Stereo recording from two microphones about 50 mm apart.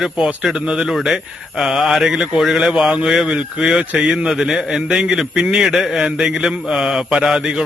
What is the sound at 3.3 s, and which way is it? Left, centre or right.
Speech, centre.